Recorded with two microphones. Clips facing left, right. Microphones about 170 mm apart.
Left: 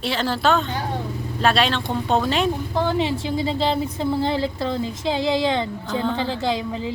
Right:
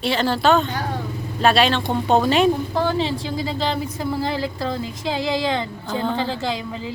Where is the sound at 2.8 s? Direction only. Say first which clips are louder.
Even; 15° left (ahead or behind).